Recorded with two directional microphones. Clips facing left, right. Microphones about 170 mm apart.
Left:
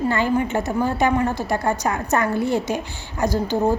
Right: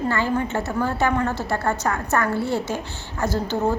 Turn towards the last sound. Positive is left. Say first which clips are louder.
# left 3 dB
turn(degrees=15)  # may be behind; listen again after turning